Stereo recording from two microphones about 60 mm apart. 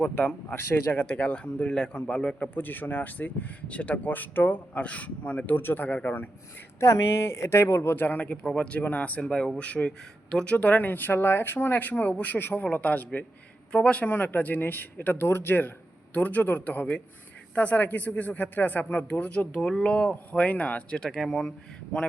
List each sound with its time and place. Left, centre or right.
0.0 s speech: left
1.0 s a man's voice: left
2.6 s speech: left
6.7 s speech: left
13.7 s speech: centre
21.0 s speech: centre